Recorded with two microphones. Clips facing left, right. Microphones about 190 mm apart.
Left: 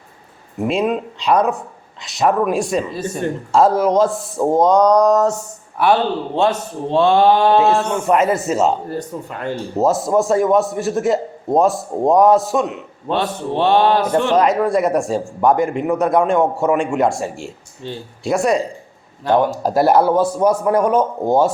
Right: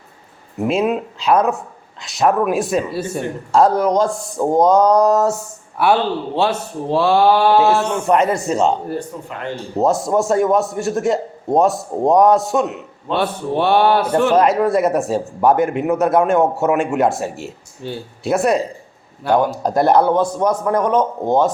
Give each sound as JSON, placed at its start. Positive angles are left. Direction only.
{"t": 0.6, "sound": "speech", "side_deg": 0}
{"t": 7.1, "sound": "mantra", "side_deg": -5}
{"t": 7.9, "sound": "speech", "side_deg": 0}
{"t": 9.7, "sound": "a man's voice", "side_deg": 0}